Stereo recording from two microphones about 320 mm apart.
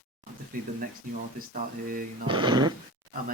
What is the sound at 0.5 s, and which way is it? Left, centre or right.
Speech, right.